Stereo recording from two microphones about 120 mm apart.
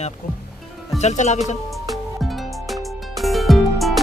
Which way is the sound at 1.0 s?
75° left (ahead or behind).